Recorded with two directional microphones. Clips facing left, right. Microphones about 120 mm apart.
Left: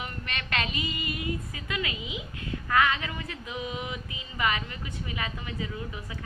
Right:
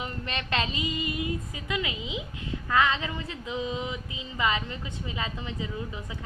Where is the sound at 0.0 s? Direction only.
30° right (ahead or behind).